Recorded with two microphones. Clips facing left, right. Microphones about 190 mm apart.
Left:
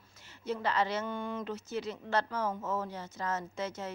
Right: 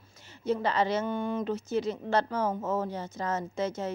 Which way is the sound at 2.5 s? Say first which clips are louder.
Right 5 dB; 35° right (ahead or behind).